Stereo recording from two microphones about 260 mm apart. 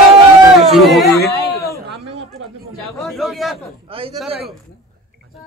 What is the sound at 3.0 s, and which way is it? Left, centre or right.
Speech, centre.